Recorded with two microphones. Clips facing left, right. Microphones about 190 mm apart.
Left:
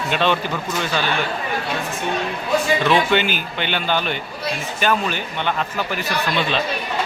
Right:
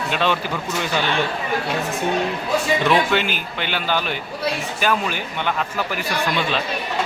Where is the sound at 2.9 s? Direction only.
Centre (ahead or behind).